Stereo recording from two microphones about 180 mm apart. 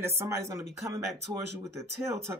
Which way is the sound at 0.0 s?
15° right (ahead or behind).